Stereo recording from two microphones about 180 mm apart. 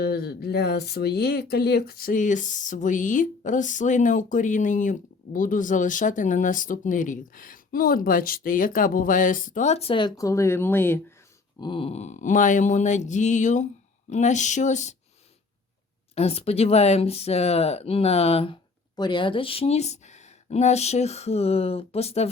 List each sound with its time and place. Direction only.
0.0 s speech: 60° left (ahead or behind); by 11.0 s 10° left (ahead or behind)
11.6 s speech: 30° left (ahead or behind)
16.1 s speech: 35° left (ahead or behind)